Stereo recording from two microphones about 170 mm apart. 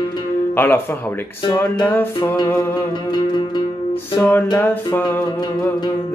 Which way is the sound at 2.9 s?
25° left (ahead or behind).